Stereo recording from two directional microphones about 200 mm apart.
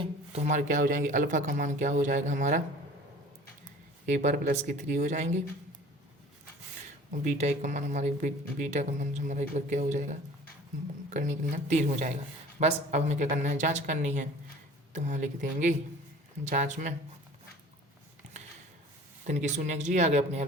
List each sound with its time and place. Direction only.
0.0 s speech: 35° right (ahead or behind)
4.0 s speech: 40° right (ahead or behind)
7.1 s speech: 35° right (ahead or behind)
19.2 s speech: 35° right (ahead or behind)